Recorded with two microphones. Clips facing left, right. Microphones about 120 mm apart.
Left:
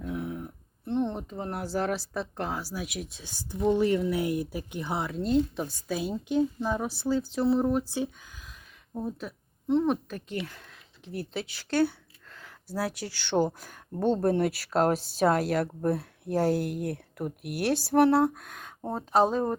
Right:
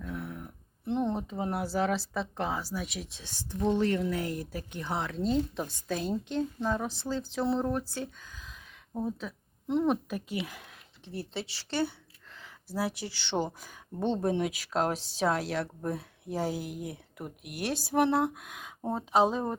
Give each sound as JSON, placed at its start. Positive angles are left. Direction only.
{"t": 0.0, "sound": "a sound", "side_deg": 20}
{"t": 0.9, "sound": "speech", "side_deg": 0}
{"t": 7.6, "sound": "speech", "side_deg": 15}
{"t": 11.7, "sound": "speech", "side_deg": 5}
{"t": 12.3, "sound": "a sound", "side_deg": 0}
{"t": 13.1, "sound": "speech", "side_deg": 0}
{"t": 14.0, "sound": "speech", "side_deg": 5}
{"t": 16.5, "sound": "speech", "side_deg": 60}
{"t": 17.2, "sound": "speech", "side_deg": 0}